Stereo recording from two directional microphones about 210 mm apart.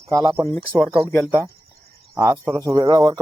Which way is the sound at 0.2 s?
20° right (ahead or behind).